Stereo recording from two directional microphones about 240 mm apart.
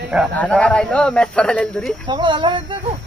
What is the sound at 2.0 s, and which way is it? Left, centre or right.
Speech, centre.